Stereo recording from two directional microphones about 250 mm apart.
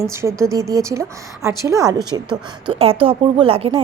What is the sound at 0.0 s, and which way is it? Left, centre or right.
A woman's voice, centre.